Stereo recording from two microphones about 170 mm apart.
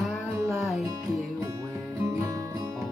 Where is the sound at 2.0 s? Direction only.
20° right (ahead or behind).